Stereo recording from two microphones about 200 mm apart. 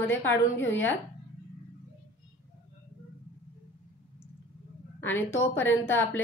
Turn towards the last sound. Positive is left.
turn(degrees=10)  # may be behind; listen again after turning